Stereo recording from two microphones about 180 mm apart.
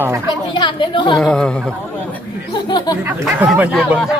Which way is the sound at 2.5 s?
25° left (ahead or behind).